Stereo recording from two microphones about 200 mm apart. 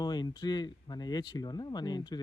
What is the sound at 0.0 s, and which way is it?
Speech, 20° left (ahead or behind).